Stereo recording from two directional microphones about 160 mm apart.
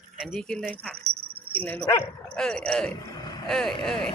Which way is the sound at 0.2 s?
5° left (ahead or behind).